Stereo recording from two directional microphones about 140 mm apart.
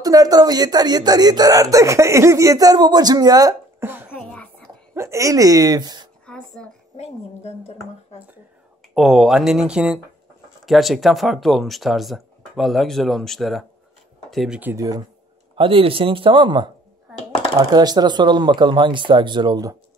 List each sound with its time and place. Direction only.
0.0 s speech: 25° right (ahead or behind)
3.8 s a sound: 15° right (ahead or behind)
4.1 s whispering: 10° left (ahead or behind)
4.9 s speech: 20° right (ahead or behind)
6.2 s a sound: 5° left (ahead or behind)
7.0 s a woman's voice: 50° left (ahead or behind)
8.9 s speech: centre (ahead or behind)
14.6 s speech: 15° right (ahead or behind)
15.5 s speech: 40° right (ahead or behind)